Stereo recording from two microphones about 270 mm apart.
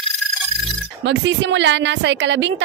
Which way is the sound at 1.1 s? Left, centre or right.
Right.